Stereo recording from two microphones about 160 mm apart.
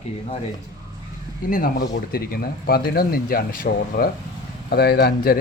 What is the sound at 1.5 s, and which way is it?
Speech, 60° left (ahead or behind).